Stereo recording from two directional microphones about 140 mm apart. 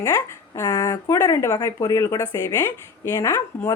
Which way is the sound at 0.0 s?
20° left (ahead or behind).